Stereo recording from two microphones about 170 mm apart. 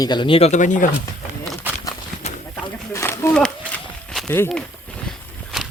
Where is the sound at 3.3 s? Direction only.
5° left (ahead or behind).